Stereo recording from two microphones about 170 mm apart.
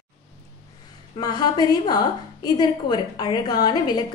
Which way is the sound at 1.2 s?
25° left (ahead or behind).